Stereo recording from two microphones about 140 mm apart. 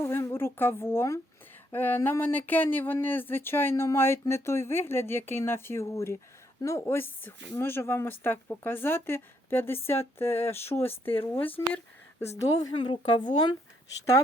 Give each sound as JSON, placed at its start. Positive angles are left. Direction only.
{"t": 0.0, "sound": "a sound", "side_deg": 15}
{"t": 1.7, "sound": "speech", "side_deg": 15}
{"t": 13.1, "sound": "speech", "side_deg": 30}